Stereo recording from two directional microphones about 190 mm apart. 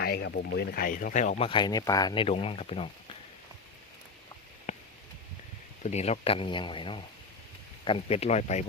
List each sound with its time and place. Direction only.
0.0 s speech: 60° left (ahead or behind); by 1.5 s 40° left (ahead or behind)
1.5 s speech: 25° left (ahead or behind)
4.7 s a sound: 40° left (ahead or behind)
5.8 s speech: 35° left (ahead or behind)